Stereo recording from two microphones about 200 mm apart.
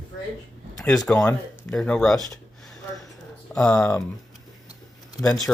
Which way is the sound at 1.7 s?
5° left (ahead or behind).